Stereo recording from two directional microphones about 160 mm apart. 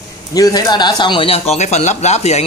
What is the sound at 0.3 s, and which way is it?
Speech, 25° left (ahead or behind).